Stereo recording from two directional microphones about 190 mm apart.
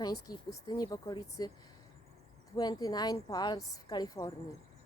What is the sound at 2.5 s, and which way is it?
Speech, 20° left (ahead or behind).